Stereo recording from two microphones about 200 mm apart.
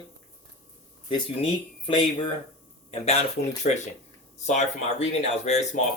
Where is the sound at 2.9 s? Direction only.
30° left (ahead or behind).